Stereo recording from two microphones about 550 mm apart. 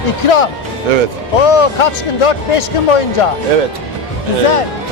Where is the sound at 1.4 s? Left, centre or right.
Left.